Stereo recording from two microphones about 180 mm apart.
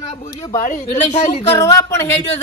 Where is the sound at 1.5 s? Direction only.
20° left (ahead or behind).